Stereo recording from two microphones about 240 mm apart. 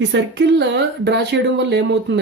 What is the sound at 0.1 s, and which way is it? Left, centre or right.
Speech, right.